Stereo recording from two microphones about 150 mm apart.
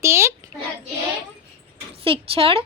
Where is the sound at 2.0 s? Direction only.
35° right (ahead or behind).